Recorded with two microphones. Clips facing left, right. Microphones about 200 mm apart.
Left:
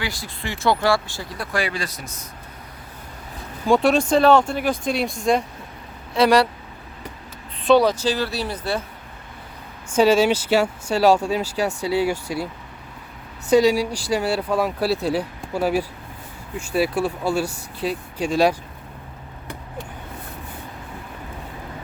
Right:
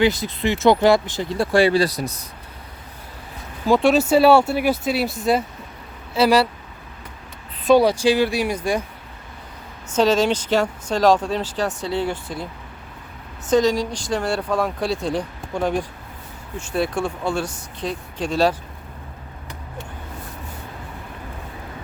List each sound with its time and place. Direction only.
0.0 s speech: 20° right (ahead or behind)
3.7 s speech: centre (ahead or behind)
7.7 s speech: 10° right (ahead or behind)
9.9 s speech: 10° left (ahead or behind)
13.5 s speech: 10° left (ahead or behind)